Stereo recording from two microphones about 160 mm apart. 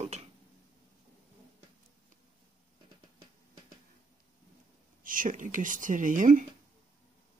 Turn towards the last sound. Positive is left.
turn(degrees=-50)  # may be behind; listen again after turning